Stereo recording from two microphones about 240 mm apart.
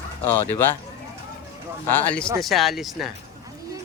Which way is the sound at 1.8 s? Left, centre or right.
Centre.